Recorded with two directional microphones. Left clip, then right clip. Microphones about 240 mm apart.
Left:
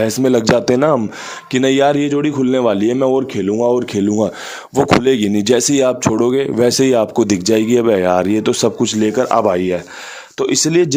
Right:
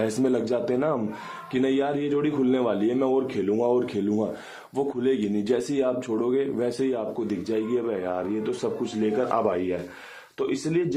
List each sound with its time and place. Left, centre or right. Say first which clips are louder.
0.0 s a man's voice: left 10 dB; left